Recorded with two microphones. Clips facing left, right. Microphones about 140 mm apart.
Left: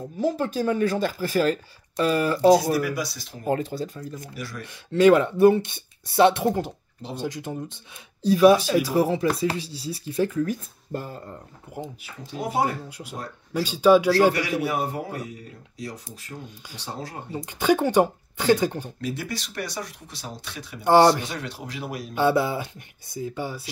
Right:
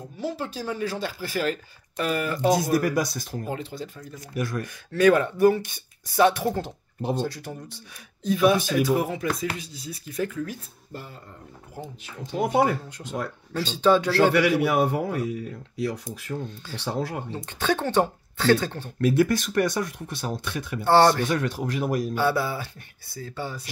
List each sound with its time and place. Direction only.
0.2 s speech: 45° left (ahead or behind)
2.7 s speech: 50° right (ahead or behind)
3.5 s speech: 40° left (ahead or behind)
4.9 s speech: 25° left (ahead or behind)
8.2 s speech: 35° left (ahead or behind)
10.4 s speech: 45° left (ahead or behind)
12.0 s speech: 5° left (ahead or behind)
13.5 s speech: 10° left (ahead or behind)
14.3 s speech: 65° right (ahead or behind)
17.3 s speech: 10° left (ahead or behind)
18.9 s speech: 55° right (ahead or behind)
20.8 s speech: 15° left (ahead or behind)
21.2 s speech: 50° right (ahead or behind)
22.1 s speech: 20° left (ahead or behind)